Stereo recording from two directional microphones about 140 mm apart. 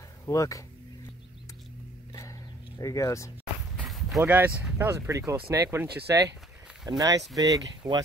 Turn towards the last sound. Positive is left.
turn(degrees=-25)  # may be behind; listen again after turning